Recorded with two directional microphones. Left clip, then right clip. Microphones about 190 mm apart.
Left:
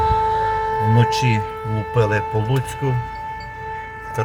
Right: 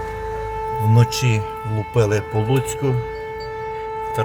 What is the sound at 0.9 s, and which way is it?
Speech, 40° right (ahead or behind).